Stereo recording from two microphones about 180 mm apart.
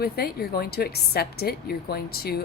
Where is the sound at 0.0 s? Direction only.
60° left (ahead or behind).